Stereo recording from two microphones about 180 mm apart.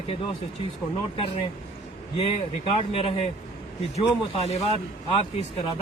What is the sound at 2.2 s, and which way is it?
Speech, 30° left (ahead or behind).